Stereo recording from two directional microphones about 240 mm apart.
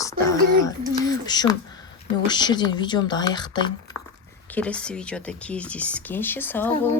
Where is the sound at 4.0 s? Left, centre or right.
Centre.